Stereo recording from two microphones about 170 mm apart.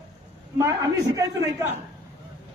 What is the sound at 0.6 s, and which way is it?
Speech, 20° right (ahead or behind).